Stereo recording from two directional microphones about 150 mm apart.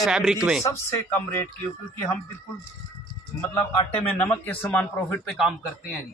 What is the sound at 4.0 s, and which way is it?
Speech, 10° left (ahead or behind).